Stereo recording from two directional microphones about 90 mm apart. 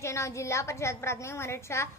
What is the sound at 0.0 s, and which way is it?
A woman's voice, 35° left (ahead or behind).